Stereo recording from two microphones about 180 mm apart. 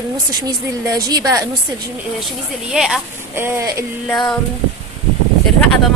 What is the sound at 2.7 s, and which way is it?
Speech, 5° right (ahead or behind).